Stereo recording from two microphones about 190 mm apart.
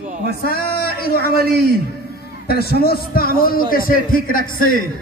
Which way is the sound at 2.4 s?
55° left (ahead or behind).